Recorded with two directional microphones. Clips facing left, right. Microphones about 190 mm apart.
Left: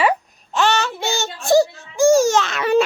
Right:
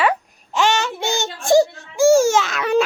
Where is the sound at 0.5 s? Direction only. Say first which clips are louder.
Even; 15° right (ahead or behind).